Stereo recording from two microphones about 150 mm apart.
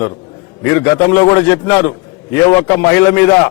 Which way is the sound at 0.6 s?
20° left (ahead or behind).